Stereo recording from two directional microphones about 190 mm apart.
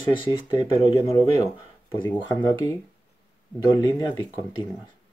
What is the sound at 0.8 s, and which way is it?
Speech, 30° left (ahead or behind).